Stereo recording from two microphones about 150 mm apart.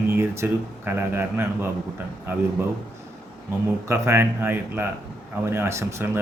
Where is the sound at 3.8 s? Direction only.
20° right (ahead or behind).